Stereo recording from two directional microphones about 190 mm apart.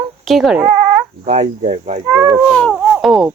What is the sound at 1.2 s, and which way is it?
Speech, 40° right (ahead or behind).